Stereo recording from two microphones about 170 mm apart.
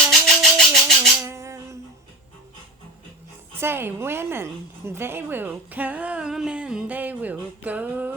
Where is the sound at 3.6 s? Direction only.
15° right (ahead or behind).